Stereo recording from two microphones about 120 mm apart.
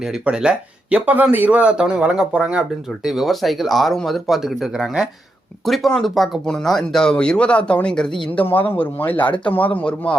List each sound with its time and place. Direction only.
0.0 s speech: 5° right (ahead or behind); by 10.2 s 10° left (ahead or behind)